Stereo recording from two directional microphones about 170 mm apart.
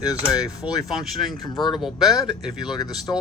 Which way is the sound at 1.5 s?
25° left (ahead or behind).